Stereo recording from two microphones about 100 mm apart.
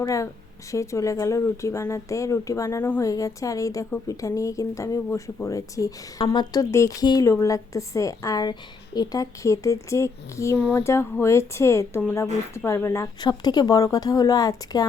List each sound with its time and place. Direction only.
0.0 s a woman's voice: 35° left (ahead or behind)
6.7 s speech: 30° left (ahead or behind)
7.0 s a woman's voice: 40° left (ahead or behind)
13.2 s a woman's voice: 40° left (ahead or behind)